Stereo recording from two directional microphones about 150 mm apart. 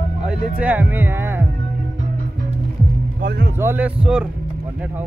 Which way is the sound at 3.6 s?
15° right (ahead or behind).